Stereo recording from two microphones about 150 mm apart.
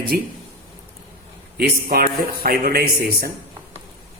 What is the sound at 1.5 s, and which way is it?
A man's voice, 90° right.